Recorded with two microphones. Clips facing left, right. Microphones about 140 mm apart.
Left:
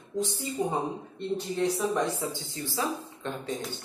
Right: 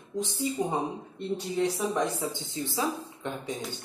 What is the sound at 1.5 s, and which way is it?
Speech, 5° right (ahead or behind).